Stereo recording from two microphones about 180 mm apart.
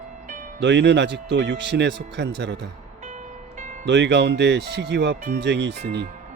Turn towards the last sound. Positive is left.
turn(degrees=-70)  # may be behind; listen again after turning